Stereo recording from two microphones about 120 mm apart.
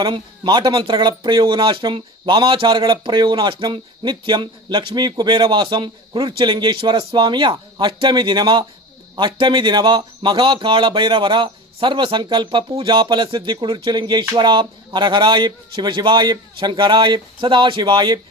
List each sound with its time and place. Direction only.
0.0 s speech: 40° right (ahead or behind)